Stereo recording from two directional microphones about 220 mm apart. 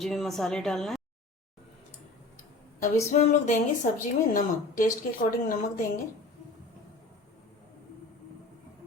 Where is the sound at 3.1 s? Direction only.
35° left (ahead or behind).